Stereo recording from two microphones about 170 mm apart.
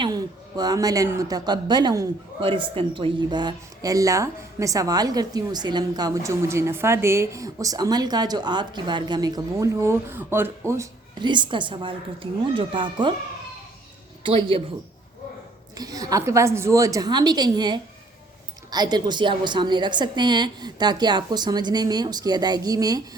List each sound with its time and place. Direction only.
0.0 s speech: 25° right (ahead or behind)
14.3 s a man's voice: 30° right (ahead or behind)
15.8 s speech: 20° right (ahead or behind)